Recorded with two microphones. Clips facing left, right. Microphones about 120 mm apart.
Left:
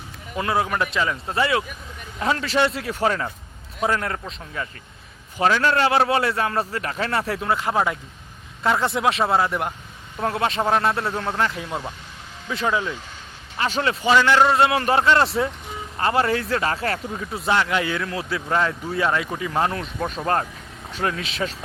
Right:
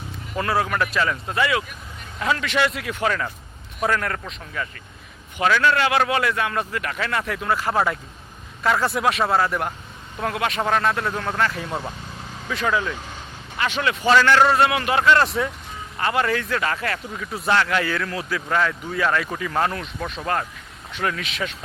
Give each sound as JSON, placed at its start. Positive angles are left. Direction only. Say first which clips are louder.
{"t": 0.3, "sound": "speech", "louder": "even", "side_deg": 20}
{"t": 1.3, "sound": "speech", "louder": "left 1 dB", "side_deg": 30}
{"t": 13.6, "sound": "speech", "louder": "left 1 dB", "side_deg": 35}
{"t": 14.0, "sound": "speech", "louder": "right 1 dB", "side_deg": 20}
{"t": 19.8, "sound": "speech", "louder": "left 3 dB", "side_deg": 40}